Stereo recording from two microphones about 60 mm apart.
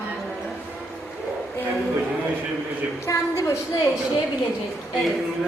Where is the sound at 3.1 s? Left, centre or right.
Left.